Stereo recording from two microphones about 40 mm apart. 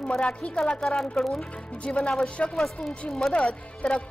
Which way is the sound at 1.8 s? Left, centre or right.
Left.